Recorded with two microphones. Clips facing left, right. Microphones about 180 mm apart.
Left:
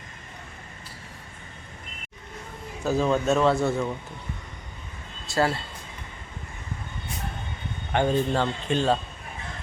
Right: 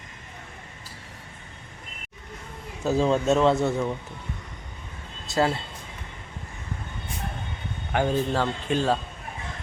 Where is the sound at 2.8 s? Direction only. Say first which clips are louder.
Right 1 dB; 25° right (ahead or behind).